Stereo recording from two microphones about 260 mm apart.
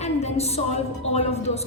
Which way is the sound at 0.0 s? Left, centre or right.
Left.